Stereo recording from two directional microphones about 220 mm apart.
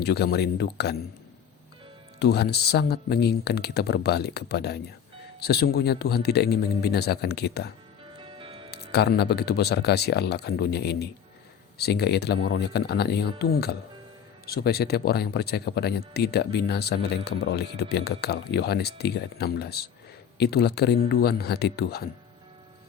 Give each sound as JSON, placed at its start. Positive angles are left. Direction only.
{"t": 0.0, "sound": "speech", "side_deg": 45}
{"t": 2.1, "sound": "speech", "side_deg": 50}
{"t": 8.2, "sound": "music", "side_deg": -25}
{"t": 8.7, "sound": "speech", "side_deg": 45}